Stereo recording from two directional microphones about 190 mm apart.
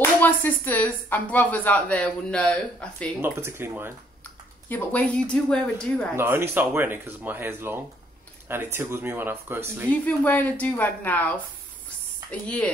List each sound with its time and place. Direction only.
0.0 s speech: 10° left (ahead or behind)
3.2 s speech: 10° right (ahead or behind)
4.2 s speech: 10° left (ahead or behind)
6.1 s speech: 10° right (ahead or behind)
9.8 s speech: 10° left (ahead or behind)